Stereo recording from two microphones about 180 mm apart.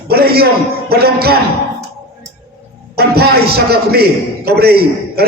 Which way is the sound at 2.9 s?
60° right (ahead or behind).